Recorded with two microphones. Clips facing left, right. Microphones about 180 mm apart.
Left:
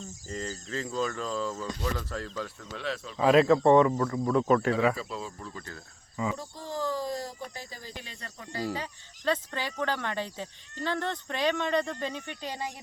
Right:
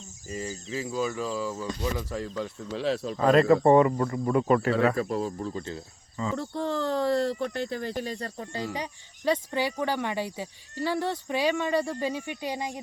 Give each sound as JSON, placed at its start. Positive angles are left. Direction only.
{"t": 0.3, "sound": "speech", "side_deg": -10}
{"t": 2.7, "sound": "speech", "side_deg": -35}
{"t": 3.2, "sound": "speech", "side_deg": 5}
{"t": 4.9, "sound": "speech", "side_deg": -50}
{"t": 5.4, "sound": "speech", "side_deg": -25}
{"t": 6.3, "sound": "speech", "side_deg": -65}
{"t": 7.9, "sound": "speech", "side_deg": -40}
{"t": 8.7, "sound": "speech", "side_deg": -15}